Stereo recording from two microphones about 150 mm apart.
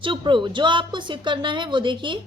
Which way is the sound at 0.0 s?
35° right (ahead or behind).